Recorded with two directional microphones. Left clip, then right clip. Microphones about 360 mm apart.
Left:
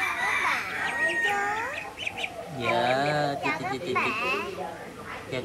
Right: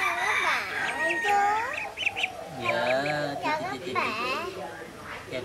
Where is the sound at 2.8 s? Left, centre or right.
Centre.